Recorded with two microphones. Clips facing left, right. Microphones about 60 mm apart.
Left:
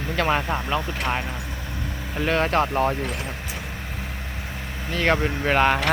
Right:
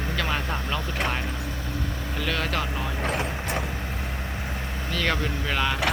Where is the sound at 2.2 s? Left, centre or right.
Left.